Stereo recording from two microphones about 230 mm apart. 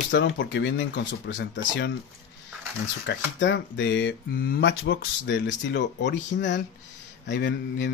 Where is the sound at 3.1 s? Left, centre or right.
Left.